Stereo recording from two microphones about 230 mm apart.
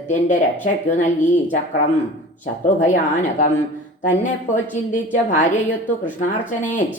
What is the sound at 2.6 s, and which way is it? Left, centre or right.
Speech, left.